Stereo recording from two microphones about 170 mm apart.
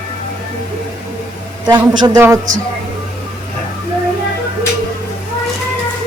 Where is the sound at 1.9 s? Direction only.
25° right (ahead or behind).